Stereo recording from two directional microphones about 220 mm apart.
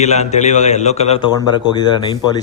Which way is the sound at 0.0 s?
30° left (ahead or behind).